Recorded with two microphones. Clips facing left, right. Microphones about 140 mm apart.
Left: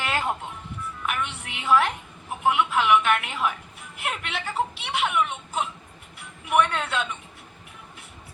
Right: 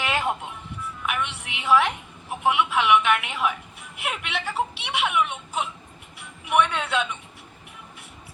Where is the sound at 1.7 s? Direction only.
5° right (ahead or behind).